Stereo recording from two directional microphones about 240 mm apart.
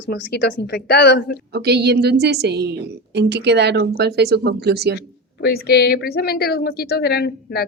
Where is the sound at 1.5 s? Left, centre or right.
Right.